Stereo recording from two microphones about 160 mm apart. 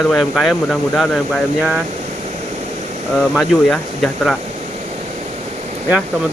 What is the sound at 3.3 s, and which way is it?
Speech, centre (ahead or behind).